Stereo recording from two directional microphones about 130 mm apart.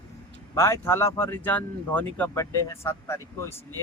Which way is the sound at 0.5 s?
20° left (ahead or behind).